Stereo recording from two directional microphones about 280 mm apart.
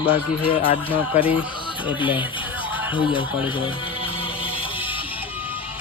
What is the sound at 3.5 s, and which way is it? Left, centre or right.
Music, centre.